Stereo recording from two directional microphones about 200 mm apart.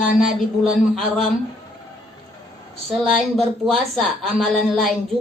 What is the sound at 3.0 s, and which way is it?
A woman's voice, centre (ahead or behind).